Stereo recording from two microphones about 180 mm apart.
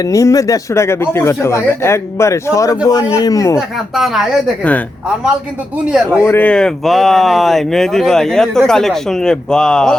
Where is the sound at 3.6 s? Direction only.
Centre (ahead or behind).